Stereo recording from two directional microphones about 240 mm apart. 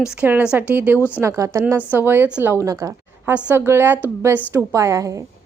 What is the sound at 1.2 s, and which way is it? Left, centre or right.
A woman's voice, centre.